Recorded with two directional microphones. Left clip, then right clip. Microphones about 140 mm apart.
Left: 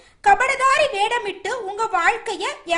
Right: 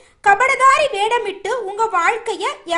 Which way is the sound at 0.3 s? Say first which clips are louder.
Right 4 dB; 5° right (ahead or behind).